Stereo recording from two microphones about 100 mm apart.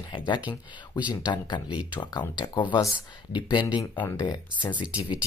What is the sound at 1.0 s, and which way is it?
Speech, 15° right (ahead or behind).